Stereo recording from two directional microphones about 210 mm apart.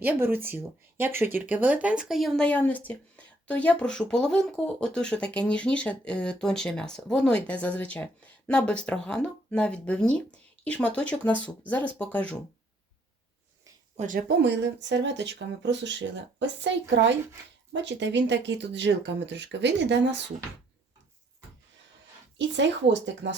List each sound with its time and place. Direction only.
0.0 s speech: 10° right (ahead or behind); by 12.2 s 5° left (ahead or behind)
13.9 s speech: 35° right (ahead or behind); by 20.2 s 55° right (ahead or behind)
22.4 s speech: 60° right (ahead or behind)